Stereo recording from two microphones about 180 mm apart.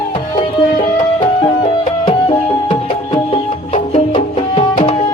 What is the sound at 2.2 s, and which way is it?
Music, 30° left (ahead or behind).